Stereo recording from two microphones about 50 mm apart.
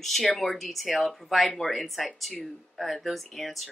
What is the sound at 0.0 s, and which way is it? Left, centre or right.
Speech, centre.